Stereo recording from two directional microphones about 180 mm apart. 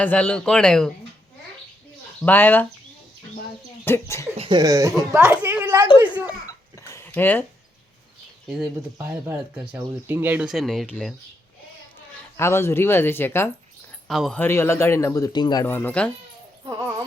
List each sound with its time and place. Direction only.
0.0 s speech: 5° left (ahead or behind)
2.2 s speech: 10° left (ahead or behind)
3.8 s speech: 15° left (ahead or behind)
4.4 s speech: 25° right (ahead or behind); by 5.9 s 10° right (ahead or behind)
6.2 s a sound: 20° left (ahead or behind)
8.4 s speech: 5° right (ahead or behind)
9.0 s speech: 15° right (ahead or behind)
12.4 s speech: 15° left (ahead or behind)
14.1 s speech: centre (ahead or behind)
14.4 s speech: 15° left (ahead or behind)
15.6 s speech: 10° left (ahead or behind)
16.6 s speech: 20° right (ahead or behind)